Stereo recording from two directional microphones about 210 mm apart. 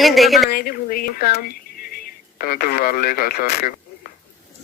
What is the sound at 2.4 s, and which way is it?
Speech, 45° left (ahead or behind).